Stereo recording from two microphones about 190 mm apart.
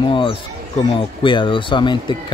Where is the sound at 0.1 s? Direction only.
25° left (ahead or behind).